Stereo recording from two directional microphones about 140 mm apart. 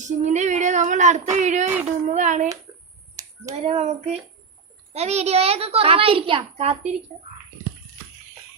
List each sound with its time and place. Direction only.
0.0 s speech: 55° right (ahead or behind)
3.5 s a child's voice: 50° right (ahead or behind)